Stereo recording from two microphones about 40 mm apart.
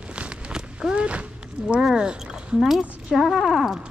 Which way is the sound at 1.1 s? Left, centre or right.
Right.